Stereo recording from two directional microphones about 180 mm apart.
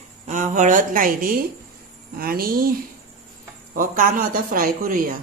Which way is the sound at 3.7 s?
50° right (ahead or behind).